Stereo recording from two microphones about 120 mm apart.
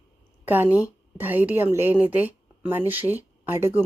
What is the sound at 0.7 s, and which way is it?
A woman's voice, 15° right (ahead or behind).